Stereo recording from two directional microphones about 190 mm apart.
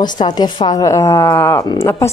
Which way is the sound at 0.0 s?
20° left (ahead or behind).